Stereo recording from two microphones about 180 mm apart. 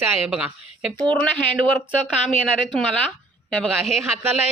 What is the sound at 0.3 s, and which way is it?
Speech, 5° right (ahead or behind).